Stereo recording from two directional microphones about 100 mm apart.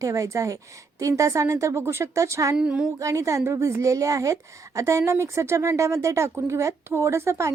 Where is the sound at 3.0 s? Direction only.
30° right (ahead or behind).